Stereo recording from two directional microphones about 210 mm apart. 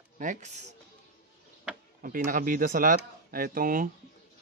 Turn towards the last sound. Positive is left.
turn(degrees=-40)  # may be behind; listen again after turning